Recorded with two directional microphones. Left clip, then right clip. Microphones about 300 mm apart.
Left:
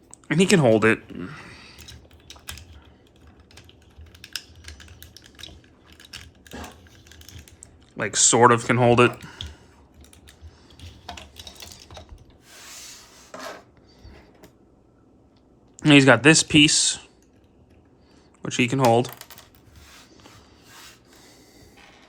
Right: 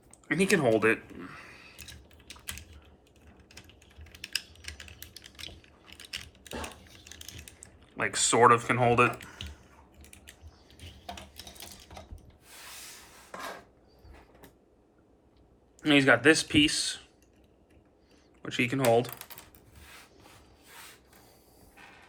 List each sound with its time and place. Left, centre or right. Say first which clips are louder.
0.3 s speech: left 7 dB; centre
6.0 s a sound: right 1 dB; centre
7.9 s speech: left 6 dB; centre
15.8 s speech: left 7 dB; centre
18.4 s speech: left 6 dB; centre